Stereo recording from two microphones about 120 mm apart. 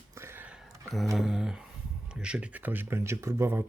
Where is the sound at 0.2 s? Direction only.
20° right (ahead or behind).